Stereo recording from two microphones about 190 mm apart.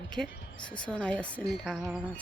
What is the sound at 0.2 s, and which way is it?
Speech, centre (ahead or behind).